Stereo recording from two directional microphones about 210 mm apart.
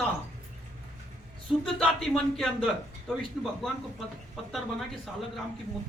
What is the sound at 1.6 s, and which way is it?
Speech, 5° left (ahead or behind).